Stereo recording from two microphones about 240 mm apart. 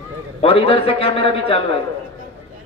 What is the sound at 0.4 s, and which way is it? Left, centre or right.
A man's voice, left.